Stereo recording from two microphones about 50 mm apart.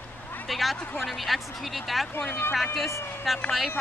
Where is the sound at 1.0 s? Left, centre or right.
Centre.